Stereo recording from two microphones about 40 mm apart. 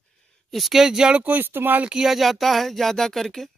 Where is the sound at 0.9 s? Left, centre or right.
Centre.